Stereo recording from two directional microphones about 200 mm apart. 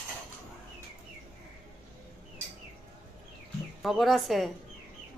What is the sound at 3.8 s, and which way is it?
Speech, centre (ahead or behind).